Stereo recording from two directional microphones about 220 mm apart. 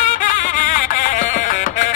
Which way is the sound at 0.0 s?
35° left (ahead or behind).